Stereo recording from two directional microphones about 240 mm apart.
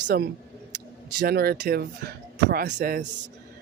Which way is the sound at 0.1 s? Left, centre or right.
Right.